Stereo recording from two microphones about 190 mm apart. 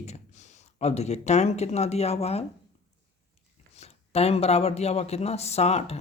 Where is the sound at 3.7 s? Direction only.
35° left (ahead or behind).